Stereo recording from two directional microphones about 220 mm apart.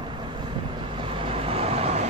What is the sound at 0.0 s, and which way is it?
Vehicle, 20° right (ahead or behind).